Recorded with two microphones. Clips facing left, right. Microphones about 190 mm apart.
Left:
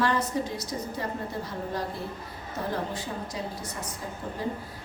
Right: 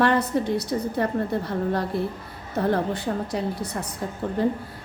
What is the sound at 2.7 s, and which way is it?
Speech, 65° right (ahead or behind).